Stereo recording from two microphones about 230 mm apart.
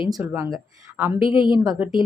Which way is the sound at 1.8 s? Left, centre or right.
Centre.